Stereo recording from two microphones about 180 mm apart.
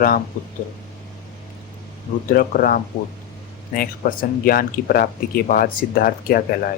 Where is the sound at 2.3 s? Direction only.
50° left (ahead or behind).